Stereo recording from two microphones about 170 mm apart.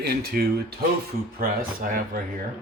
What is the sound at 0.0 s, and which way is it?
Speech, 65° right (ahead or behind).